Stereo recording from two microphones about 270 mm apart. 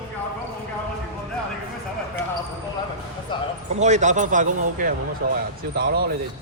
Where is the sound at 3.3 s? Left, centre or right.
Centre.